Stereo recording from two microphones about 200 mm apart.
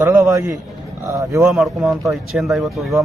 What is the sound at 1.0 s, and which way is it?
Speech, 15° right (ahead or behind).